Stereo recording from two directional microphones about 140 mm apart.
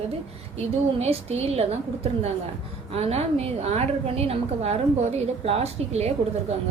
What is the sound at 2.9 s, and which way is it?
A woman's voice, 45° right (ahead or behind).